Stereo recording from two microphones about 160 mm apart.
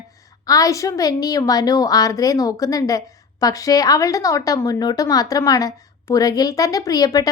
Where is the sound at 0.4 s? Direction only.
20° left (ahead or behind).